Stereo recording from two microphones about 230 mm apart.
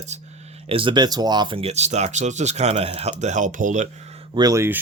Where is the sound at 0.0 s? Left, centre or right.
Right.